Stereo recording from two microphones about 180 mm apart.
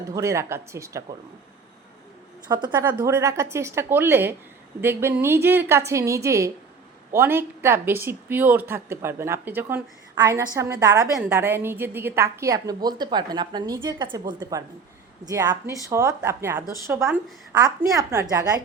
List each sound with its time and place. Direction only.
0.1 s speech: 15° right (ahead or behind)
2.5 s a woman's voice: 25° right (ahead or behind)
2.7 s a woman's voice: 15° right (ahead or behind)